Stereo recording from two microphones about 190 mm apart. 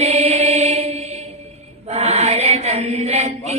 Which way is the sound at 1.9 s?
35° right (ahead or behind).